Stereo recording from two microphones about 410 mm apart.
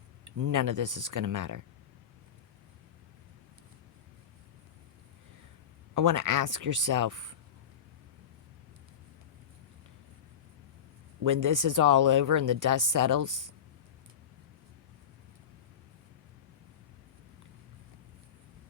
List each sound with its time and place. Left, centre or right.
0.3 s speech: right
5.9 s speech: right
11.2 s speech: right